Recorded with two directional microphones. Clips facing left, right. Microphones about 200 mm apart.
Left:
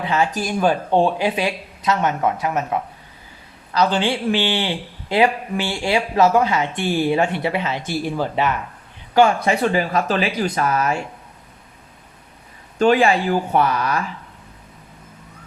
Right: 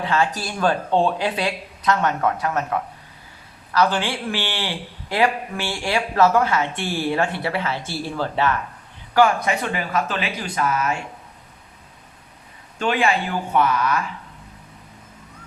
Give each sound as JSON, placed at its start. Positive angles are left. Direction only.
{"t": 0.0, "sound": "a man's voice", "side_deg": 15}
{"t": 9.1, "sound": "speech", "side_deg": 25}
{"t": 12.8, "sound": "speech", "side_deg": 35}